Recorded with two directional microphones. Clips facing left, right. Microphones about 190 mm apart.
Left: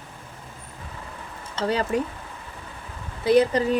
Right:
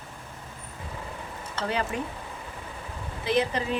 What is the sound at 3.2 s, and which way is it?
Speech, 40° left (ahead or behind).